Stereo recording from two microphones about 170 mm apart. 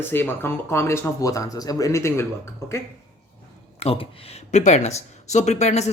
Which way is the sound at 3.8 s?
35° left (ahead or behind).